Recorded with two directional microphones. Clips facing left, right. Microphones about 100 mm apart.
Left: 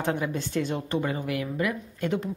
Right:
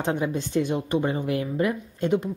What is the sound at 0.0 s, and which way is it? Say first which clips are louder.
A woman's voice: right 2 dB; 20° right (ahead or behind).